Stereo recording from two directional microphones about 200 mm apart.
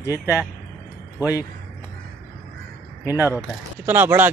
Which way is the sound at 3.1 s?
10° right (ahead or behind).